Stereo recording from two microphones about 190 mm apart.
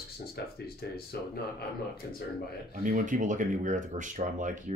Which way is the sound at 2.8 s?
45° right (ahead or behind).